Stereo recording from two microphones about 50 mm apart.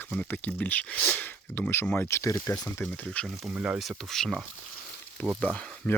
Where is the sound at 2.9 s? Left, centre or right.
Left.